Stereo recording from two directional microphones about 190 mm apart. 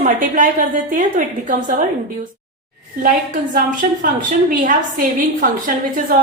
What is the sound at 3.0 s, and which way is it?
A woman's voice, 45° right (ahead or behind).